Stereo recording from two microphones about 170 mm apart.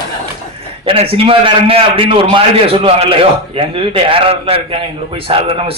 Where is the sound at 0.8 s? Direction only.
35° right (ahead or behind).